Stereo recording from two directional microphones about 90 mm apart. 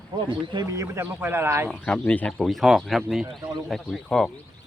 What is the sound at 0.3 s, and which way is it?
Speech, 60° right (ahead or behind).